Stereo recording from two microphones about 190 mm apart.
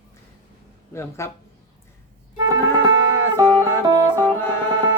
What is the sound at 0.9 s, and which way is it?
Speech, 15° left (ahead or behind).